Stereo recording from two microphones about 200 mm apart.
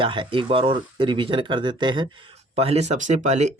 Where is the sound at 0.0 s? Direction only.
25° right (ahead or behind).